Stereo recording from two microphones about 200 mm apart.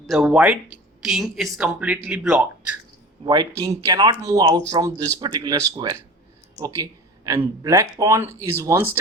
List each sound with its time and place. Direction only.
0.0 s speech: centre (ahead or behind)
3.6 s speech: 15° right (ahead or behind)
7.3 s speech: 15° right (ahead or behind)